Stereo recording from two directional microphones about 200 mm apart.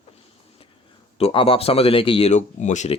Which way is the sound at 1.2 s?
25° left (ahead or behind).